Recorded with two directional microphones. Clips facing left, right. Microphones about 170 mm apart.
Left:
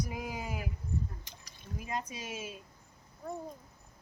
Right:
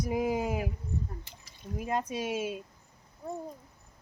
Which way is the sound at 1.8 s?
55° right (ahead or behind).